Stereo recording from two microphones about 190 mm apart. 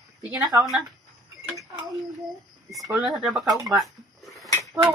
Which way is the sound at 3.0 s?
5° right (ahead or behind).